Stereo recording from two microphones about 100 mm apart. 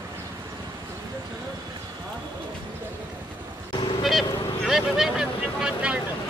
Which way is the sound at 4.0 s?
Centre (ahead or behind).